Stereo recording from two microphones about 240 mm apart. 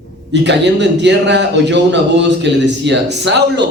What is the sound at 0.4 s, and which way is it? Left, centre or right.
Speech, right.